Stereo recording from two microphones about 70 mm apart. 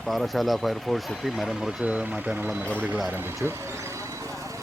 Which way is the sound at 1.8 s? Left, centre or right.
Centre.